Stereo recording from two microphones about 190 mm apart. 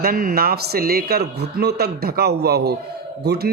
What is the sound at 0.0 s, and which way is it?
A man's voice, 50° right (ahead or behind).